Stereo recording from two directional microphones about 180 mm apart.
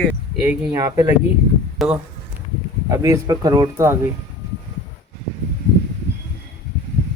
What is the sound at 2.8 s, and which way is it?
Speech, 15° right (ahead or behind).